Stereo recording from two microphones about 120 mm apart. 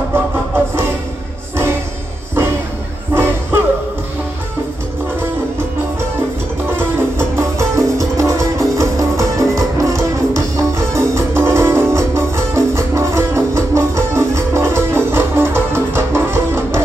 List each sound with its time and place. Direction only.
3.2 s music: 20° right (ahead or behind)
6.8 s music: 20° right (ahead or behind)